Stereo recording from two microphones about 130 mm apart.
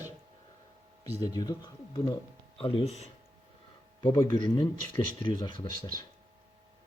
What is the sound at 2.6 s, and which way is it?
Speech, 50° left (ahead or behind).